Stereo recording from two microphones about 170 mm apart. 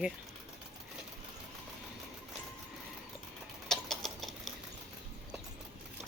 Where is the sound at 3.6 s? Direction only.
Centre (ahead or behind).